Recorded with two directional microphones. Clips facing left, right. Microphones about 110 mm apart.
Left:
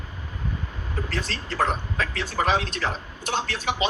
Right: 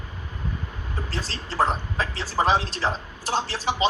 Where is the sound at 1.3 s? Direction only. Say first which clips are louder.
Right 3 dB; 30° right (ahead or behind).